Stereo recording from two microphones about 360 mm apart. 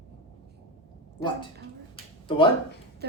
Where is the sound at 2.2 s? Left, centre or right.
Centre.